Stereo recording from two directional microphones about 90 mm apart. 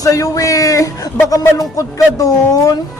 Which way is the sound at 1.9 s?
40° left (ahead or behind).